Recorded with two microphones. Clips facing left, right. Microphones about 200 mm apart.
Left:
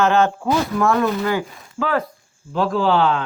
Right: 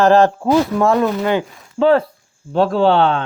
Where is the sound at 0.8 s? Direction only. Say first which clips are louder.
Right 3 dB; 20° right (ahead or behind).